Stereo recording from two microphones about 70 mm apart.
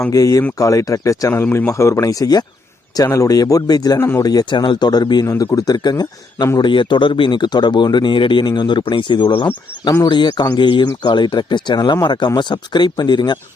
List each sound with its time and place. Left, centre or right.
0.1 s speech: left
1.5 s speech: left
3.9 s speech: left
4.2 s speech: left
5.5 s speech: left
6.6 s speech: left